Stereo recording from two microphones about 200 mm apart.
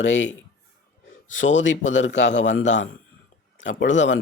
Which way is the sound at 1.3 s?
70° left (ahead or behind).